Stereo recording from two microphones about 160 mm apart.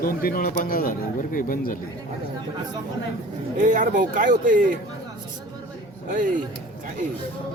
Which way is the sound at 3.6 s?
55° right (ahead or behind).